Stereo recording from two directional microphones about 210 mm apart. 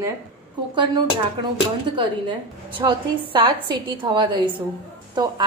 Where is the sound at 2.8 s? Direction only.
25° right (ahead or behind).